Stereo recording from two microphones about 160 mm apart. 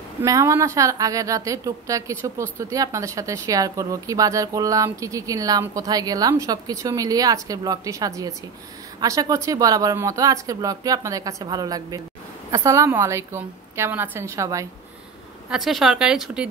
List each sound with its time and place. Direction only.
0.2 s a woman's voice: 20° right (ahead or behind)
15.5 s speech: centre (ahead or behind)